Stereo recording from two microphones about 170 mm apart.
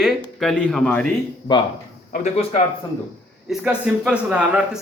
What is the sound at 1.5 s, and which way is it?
Speech, 25° left (ahead or behind).